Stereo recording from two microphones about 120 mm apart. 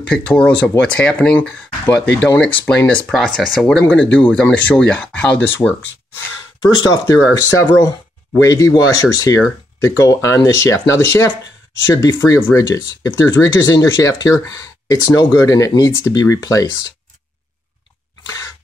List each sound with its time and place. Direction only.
0.1 s speech: 10° left (ahead or behind)
3.1 s speech: centre (ahead or behind)
6.6 s speech: 35° left (ahead or behind)
18.2 s sneeze: 30° left (ahead or behind)